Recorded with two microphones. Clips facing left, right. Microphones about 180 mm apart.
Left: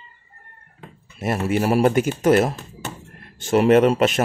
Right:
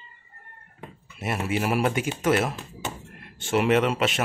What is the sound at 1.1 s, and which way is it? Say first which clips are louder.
Speech: left 6 dB; 40° left (ahead or behind).